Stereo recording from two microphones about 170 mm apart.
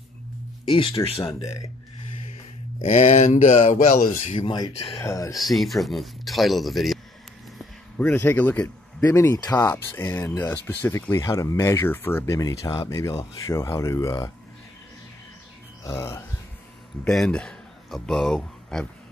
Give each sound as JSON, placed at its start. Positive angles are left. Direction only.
{"t": 0.7, "sound": "speech", "side_deg": 30}
{"t": 1.4, "sound": "speech", "side_deg": 20}
{"t": 2.8, "sound": "speech", "side_deg": 40}
{"t": 3.7, "sound": "speech", "side_deg": 50}
{"t": 4.4, "sound": "speech", "side_deg": 25}
{"t": 5.0, "sound": "speech", "side_deg": 20}
{"t": 5.4, "sound": "speech", "side_deg": 0}
{"t": 15.8, "sound": "speech", "side_deg": 15}
{"t": 17.0, "sound": "speech", "side_deg": 5}